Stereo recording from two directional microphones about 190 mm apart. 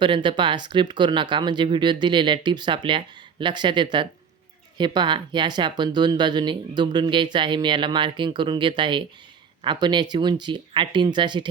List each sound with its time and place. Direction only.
0.0 s speech: 25° right (ahead or behind)